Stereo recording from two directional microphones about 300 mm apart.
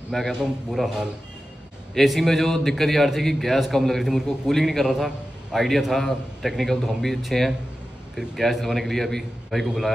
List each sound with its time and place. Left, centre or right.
0.1 s a man's voice: centre